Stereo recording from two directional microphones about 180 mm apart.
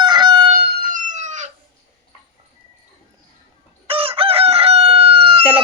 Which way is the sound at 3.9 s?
30° right (ahead or behind).